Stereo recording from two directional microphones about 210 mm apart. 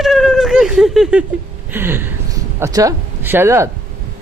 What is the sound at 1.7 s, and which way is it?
Speech, 10° right (ahead or behind).